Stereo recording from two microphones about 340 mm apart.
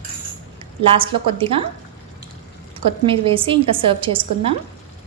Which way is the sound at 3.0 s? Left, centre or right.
Centre.